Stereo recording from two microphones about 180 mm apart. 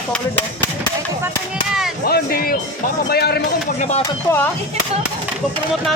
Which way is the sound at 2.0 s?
55° left (ahead or behind).